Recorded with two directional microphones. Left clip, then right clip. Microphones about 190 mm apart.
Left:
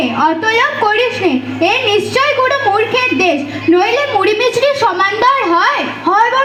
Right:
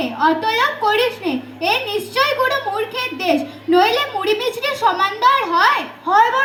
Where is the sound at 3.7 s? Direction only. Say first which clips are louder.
Left 4 dB; 35° right (ahead or behind).